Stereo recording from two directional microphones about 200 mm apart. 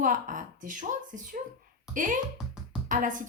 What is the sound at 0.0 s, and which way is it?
Speech, 40° right (ahead or behind).